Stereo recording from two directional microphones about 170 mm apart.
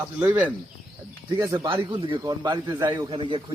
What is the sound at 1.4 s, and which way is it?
A man's voice, 20° right (ahead or behind).